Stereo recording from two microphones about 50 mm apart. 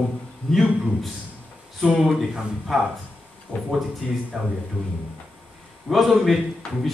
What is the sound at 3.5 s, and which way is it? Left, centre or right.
Speech, right.